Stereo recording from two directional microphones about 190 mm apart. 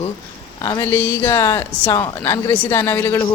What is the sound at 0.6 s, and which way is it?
A man's voice, 20° left (ahead or behind).